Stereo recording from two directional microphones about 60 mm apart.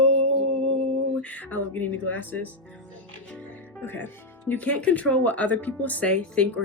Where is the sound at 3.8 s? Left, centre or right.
Left.